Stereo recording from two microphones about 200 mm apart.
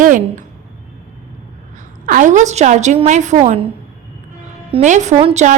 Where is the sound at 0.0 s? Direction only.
40° right (ahead or behind).